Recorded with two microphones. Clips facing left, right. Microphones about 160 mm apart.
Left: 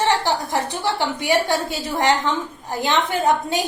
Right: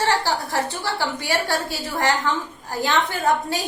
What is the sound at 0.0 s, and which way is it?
A woman's voice, 20° left (ahead or behind).